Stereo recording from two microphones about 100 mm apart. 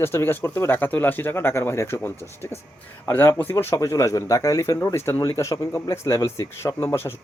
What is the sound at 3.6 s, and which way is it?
Speech, 30° left (ahead or behind).